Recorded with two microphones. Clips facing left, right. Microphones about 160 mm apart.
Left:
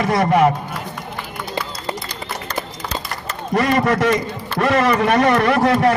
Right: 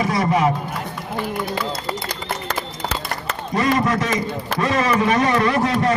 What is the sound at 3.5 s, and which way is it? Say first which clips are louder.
A man's voice: left 2 dB; 65° left (ahead or behind).